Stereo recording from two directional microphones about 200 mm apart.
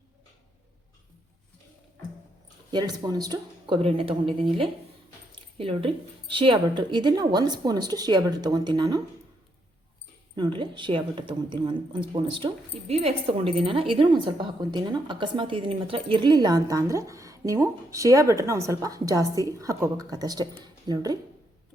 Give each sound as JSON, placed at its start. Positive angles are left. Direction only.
{"t": 2.7, "sound": "a woman's voice", "side_deg": -20}
{"t": 10.3, "sound": "a woman's voice", "side_deg": -20}